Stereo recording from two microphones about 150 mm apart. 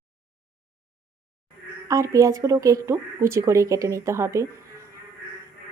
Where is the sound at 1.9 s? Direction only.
20° right (ahead or behind).